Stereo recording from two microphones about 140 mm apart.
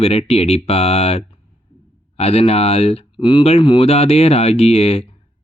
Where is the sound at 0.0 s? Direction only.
45° left (ahead or behind).